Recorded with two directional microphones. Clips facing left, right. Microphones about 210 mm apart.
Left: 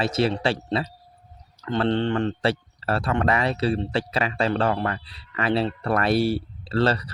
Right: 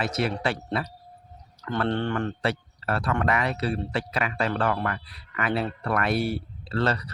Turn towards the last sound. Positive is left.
turn(degrees=30)  # may be behind; listen again after turning